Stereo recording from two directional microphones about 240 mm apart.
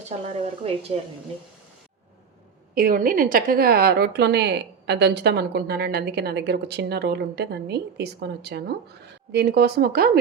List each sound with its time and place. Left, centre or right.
0.6 s a woman's voice: right
2.7 s a woman's voice: right